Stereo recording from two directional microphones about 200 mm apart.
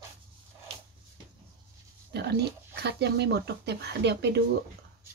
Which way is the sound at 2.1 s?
55° right (ahead or behind).